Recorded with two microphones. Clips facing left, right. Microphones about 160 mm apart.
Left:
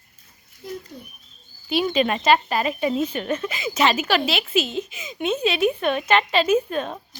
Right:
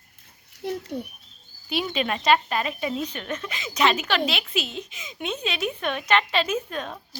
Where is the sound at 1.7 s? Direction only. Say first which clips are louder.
Left 5 dB; centre (ahead or behind).